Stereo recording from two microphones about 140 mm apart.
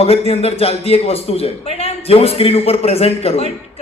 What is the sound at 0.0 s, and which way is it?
A man's voice, 45° left (ahead or behind).